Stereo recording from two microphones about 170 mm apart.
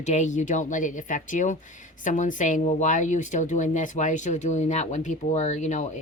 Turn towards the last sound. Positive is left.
turn(degrees=45)  # may be behind; listen again after turning